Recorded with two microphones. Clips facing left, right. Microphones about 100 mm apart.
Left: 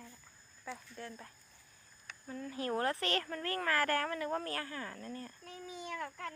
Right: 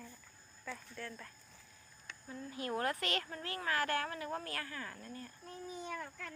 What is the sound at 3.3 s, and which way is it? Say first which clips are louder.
Speech: left 4 dB; 50° left (ahead or behind).